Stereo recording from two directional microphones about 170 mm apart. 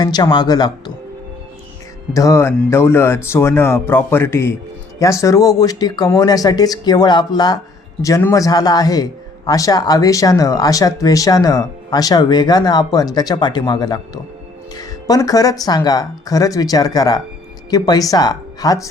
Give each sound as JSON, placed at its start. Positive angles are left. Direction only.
{"t": 0.0, "sound": "speech", "side_deg": 25}
{"t": 2.1, "sound": "speech", "side_deg": 20}